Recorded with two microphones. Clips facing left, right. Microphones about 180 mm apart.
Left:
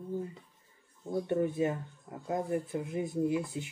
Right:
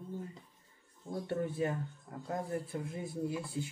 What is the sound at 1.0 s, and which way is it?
Speech, 20° left (ahead or behind).